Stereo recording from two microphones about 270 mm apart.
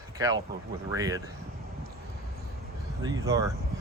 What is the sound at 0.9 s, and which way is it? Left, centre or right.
Speech, centre.